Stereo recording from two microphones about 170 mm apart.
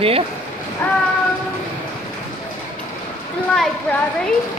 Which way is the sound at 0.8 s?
10° left (ahead or behind).